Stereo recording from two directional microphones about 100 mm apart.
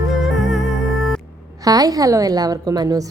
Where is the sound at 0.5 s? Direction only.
Centre (ahead or behind).